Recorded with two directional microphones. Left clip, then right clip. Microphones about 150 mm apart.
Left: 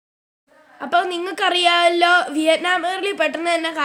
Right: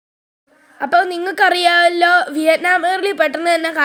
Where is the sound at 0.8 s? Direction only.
25° right (ahead or behind).